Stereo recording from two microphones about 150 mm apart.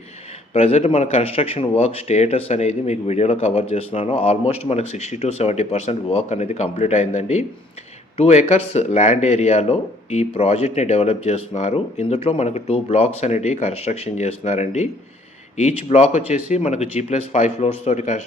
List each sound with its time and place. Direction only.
0.5 s speech: 45° left (ahead or behind)